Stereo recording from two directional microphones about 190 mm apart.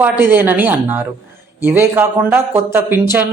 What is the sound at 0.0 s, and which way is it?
Speech, 10° right (ahead or behind).